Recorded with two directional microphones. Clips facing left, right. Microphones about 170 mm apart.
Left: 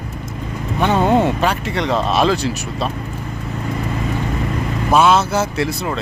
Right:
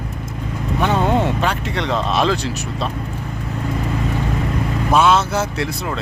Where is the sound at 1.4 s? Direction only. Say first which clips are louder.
Left 2 dB; 5° left (ahead or behind).